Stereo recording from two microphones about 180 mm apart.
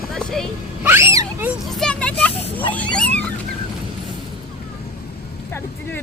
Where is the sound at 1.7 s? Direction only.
5° left (ahead or behind).